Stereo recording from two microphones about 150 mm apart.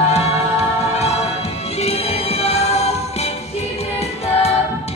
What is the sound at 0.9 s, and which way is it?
Music, 45° left (ahead or behind).